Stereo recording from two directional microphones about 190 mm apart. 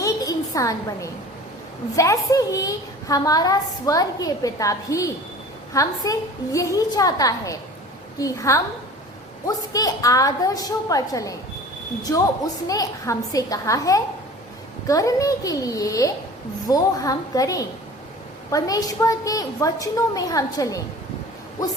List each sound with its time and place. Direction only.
0.0 s a sound: 15° left (ahead or behind)
2.0 s a woman's voice: 15° left (ahead or behind)
12.6 s a woman's voice: 20° left (ahead or behind)